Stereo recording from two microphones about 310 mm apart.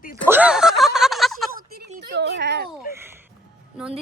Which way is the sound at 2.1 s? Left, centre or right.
Right.